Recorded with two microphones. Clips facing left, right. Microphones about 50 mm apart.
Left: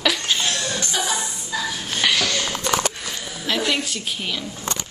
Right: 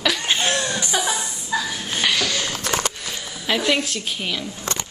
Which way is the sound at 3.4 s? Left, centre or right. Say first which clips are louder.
Right 2 dB; centre.